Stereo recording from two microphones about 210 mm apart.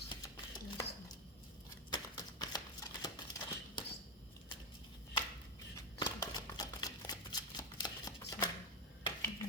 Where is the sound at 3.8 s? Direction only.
20° left (ahead or behind).